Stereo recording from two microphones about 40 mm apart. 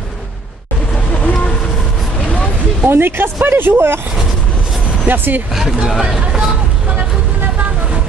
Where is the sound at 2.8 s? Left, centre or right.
Right.